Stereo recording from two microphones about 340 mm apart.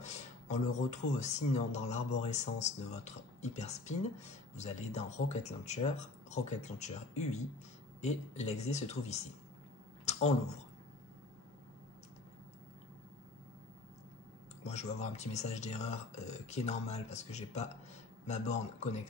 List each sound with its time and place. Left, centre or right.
0.0 s speech: left
14.6 s speech: centre